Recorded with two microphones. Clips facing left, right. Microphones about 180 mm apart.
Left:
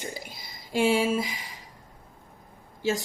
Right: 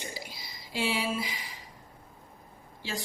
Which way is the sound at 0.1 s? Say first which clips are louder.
Left 3 dB; 50° left (ahead or behind).